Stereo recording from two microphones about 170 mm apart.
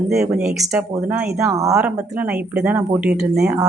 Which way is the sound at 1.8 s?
10° right (ahead or behind).